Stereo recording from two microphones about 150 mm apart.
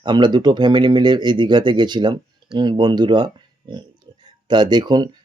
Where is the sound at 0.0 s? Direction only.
30° right (ahead or behind).